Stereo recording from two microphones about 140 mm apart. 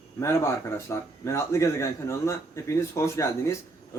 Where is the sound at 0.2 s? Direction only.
20° left (ahead or behind).